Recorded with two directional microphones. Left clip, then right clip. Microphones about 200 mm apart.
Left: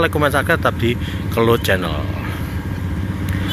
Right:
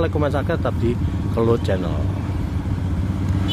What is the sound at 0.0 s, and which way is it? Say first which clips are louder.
Speech: left 5 dB; centre (ahead or behind).